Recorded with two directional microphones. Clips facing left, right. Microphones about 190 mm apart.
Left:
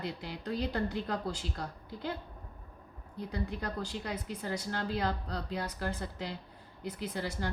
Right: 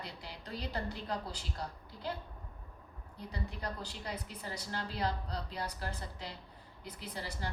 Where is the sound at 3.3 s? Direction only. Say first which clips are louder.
Left 5 dB; 50° left (ahead or behind).